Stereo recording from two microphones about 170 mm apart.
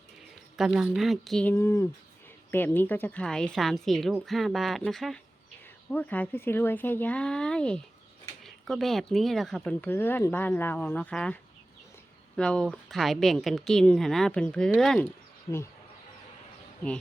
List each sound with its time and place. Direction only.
0.5 s speech: 5° right (ahead or behind)
1.5 s speech: 15° left (ahead or behind)
12.4 s speech: 5° left (ahead or behind)